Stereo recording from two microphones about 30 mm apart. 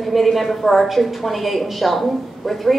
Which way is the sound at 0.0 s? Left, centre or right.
Centre.